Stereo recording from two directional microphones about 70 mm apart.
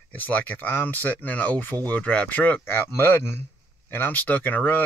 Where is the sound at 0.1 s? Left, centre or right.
Left.